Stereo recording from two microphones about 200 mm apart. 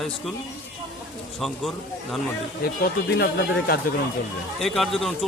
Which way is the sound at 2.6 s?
50° left (ahead or behind).